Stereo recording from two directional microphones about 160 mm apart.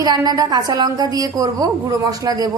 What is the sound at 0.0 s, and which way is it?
A woman's voice, 25° right (ahead or behind).